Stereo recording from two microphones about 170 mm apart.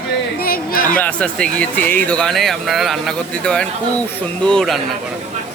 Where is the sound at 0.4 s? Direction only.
60° left (ahead or behind).